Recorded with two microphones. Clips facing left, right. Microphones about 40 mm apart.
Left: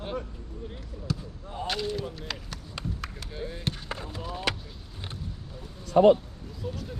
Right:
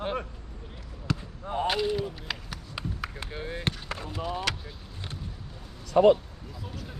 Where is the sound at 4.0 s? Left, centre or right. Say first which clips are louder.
Right 3 dB; right.